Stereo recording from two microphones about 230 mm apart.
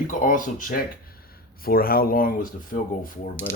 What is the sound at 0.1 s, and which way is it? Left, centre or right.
Speech, left.